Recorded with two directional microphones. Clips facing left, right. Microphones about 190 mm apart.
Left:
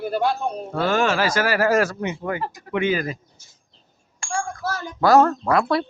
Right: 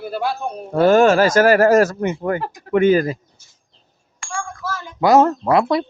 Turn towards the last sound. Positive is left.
turn(degrees=-20)  # may be behind; listen again after turning